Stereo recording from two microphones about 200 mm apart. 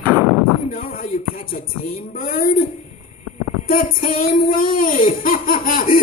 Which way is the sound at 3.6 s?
45° left (ahead or behind).